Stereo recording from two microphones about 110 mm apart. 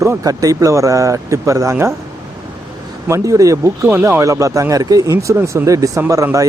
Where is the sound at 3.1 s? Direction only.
30° right (ahead or behind).